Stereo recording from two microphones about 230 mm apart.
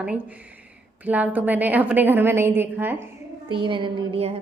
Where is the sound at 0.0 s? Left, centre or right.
Centre.